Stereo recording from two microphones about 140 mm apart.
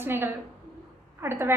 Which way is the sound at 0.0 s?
15° right (ahead or behind).